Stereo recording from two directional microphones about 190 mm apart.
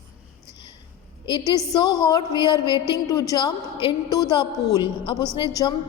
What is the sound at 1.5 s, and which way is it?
A woman's voice, 20° left (ahead or behind).